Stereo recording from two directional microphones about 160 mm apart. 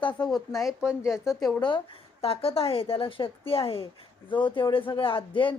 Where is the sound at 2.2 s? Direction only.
35° left (ahead or behind).